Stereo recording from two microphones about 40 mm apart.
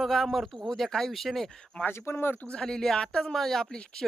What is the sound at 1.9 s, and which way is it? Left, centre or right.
Speech, left.